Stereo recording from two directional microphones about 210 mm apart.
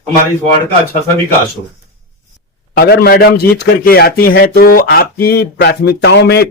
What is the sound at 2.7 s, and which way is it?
A man's voice, 45° left (ahead or behind).